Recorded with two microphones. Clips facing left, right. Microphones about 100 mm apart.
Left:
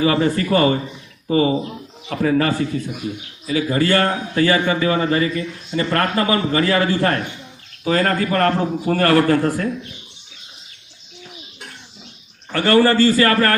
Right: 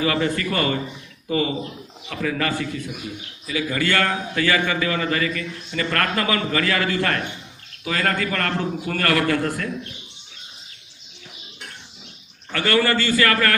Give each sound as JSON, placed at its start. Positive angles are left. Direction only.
{"t": 0.0, "sound": "a man's voice", "side_deg": 30}
{"t": 12.5, "sound": "a man's voice", "side_deg": 35}